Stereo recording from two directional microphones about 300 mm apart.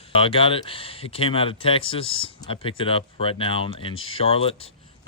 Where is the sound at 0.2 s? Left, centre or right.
Centre.